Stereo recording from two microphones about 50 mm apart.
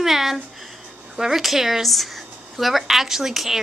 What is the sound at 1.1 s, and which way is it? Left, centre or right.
A woman's voice, centre.